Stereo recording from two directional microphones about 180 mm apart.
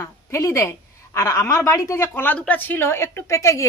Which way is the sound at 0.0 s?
15° left (ahead or behind).